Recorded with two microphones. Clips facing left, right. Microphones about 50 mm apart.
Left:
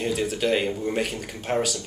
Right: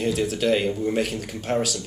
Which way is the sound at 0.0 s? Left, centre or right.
Centre.